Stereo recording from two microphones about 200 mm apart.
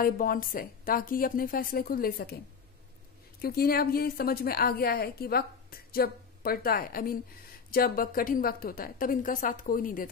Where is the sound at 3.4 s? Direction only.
50° left (ahead or behind).